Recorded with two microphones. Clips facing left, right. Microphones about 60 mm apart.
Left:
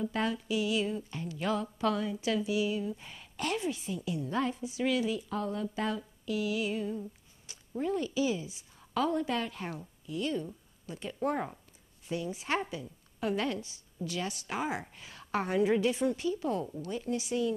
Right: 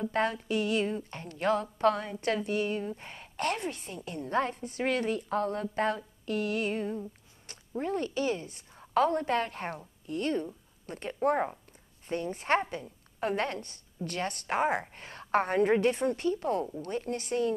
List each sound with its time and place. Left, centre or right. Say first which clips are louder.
0.1 s speech: right 3 dB; right
7.5 s a sound: right 3 dB; right
7.8 s a woman's voice: even; right
11.2 s speech: right 5 dB; right
12.1 s speech: right 4 dB; right